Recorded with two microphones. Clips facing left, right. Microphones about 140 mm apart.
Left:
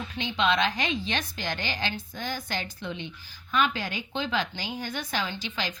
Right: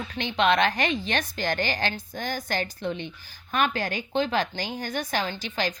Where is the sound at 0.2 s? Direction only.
60° right (ahead or behind).